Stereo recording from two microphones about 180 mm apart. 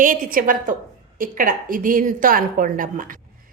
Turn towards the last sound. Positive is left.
turn(degrees=-50)  # may be behind; listen again after turning